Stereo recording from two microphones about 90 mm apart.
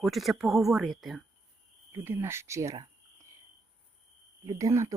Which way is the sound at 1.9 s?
30° right (ahead or behind).